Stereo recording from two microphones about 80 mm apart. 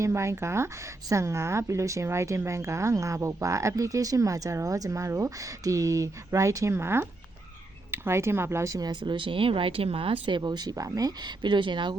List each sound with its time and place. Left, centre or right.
0.0 s speech: right
8.9 s speech: right
10.4 s speech: right
11.4 s speech: right